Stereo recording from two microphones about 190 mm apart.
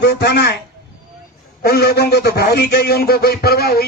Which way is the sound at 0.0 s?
60° left (ahead or behind).